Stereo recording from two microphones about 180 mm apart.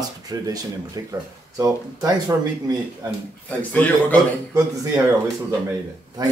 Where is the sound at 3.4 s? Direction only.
10° left (ahead or behind).